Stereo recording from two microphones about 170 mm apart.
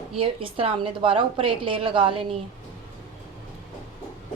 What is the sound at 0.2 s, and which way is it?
A woman's voice, 30° right (ahead or behind).